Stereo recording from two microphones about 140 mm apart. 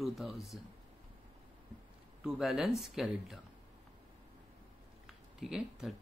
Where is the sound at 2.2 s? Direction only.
5° right (ahead or behind).